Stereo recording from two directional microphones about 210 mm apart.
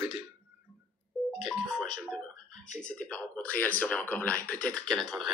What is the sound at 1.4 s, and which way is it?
Telephone, centre (ahead or behind).